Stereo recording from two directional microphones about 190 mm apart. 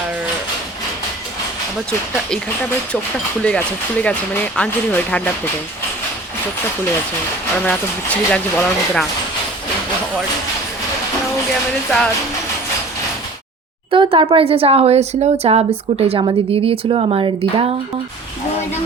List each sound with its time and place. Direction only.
3.4 s speech: 5° left (ahead or behind)
7.6 s speech: 5° left (ahead or behind)
11.9 s speech: centre (ahead or behind)
13.9 s speech: 25° right (ahead or behind)